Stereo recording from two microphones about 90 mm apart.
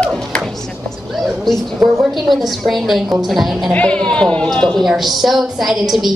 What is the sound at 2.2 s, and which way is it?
A woman's voice, centre (ahead or behind).